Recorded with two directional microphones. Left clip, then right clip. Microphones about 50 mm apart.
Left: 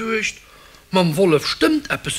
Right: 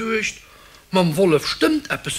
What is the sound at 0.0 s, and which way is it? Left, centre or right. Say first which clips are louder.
Speech: left 1 dB; left.